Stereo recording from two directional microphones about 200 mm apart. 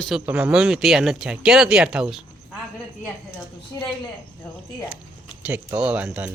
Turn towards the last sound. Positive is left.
turn(degrees=-10)  # may be behind; listen again after turning